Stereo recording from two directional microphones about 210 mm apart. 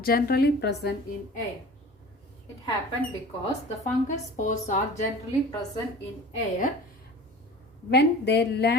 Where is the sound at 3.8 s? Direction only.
35° left (ahead or behind).